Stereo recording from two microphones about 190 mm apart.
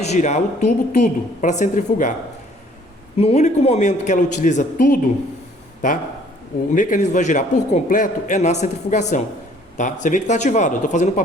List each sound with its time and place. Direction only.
0.0 s a man's voice: 35° left (ahead or behind)
3.2 s a man's voice: 35° left (ahead or behind)
6.7 s a man's voice: 40° left (ahead or behind)